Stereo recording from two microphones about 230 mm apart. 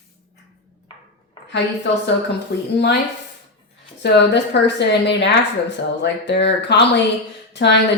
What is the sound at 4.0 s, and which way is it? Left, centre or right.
Speech, left.